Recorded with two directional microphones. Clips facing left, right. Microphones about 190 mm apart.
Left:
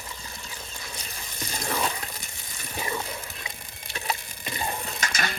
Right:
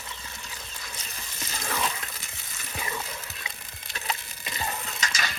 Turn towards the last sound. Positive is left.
turn(degrees=55)  # may be behind; listen again after turning